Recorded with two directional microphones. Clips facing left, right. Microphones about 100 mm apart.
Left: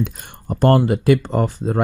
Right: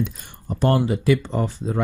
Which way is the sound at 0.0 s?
55° left (ahead or behind).